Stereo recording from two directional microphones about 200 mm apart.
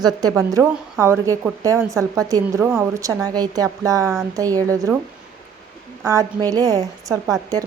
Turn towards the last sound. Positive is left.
turn(degrees=-15)  # may be behind; listen again after turning